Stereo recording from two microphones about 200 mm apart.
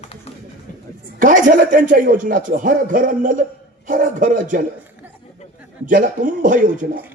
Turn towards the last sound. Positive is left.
turn(degrees=-40)  # may be behind; listen again after turning